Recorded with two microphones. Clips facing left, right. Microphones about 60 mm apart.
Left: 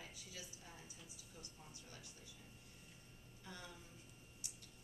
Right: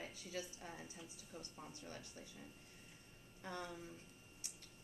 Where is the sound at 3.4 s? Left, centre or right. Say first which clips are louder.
Right 7 dB; right.